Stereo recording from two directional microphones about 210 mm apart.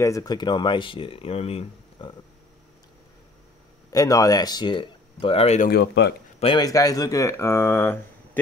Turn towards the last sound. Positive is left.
turn(degrees=10)  # may be behind; listen again after turning